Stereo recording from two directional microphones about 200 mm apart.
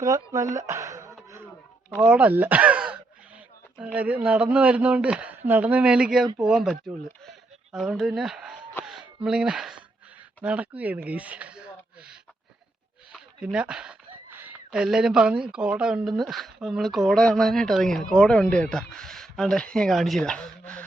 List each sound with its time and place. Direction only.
0.0 s speech: 15° right (ahead or behind)
0.7 s a sound: 15° right (ahead or behind)
2.0 s speech: 5° right (ahead or behind)
13.1 s speech: 5° right (ahead or behind)